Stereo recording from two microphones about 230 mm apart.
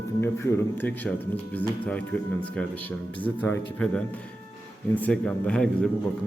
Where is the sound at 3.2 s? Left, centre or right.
Centre.